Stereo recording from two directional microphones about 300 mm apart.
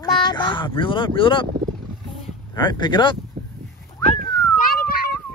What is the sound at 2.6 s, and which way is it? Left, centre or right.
Speech, centre.